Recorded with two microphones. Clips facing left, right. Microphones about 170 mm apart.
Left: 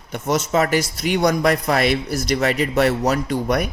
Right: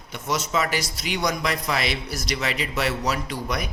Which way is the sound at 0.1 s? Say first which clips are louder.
Left 6 dB; 45° left (ahead or behind).